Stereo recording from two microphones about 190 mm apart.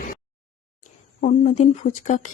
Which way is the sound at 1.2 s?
45° left (ahead or behind).